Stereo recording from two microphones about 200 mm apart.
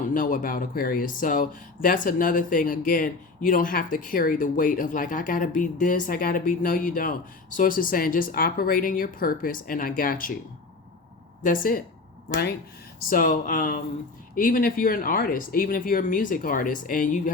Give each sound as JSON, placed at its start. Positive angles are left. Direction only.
{"t": 0.1, "sound": "speech", "side_deg": 40}
{"t": 11.4, "sound": "speech", "side_deg": 45}
{"t": 13.1, "sound": "speech", "side_deg": 45}